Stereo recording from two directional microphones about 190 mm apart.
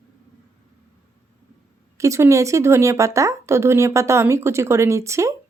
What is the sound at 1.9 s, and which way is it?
A woman's voice, 15° right (ahead or behind).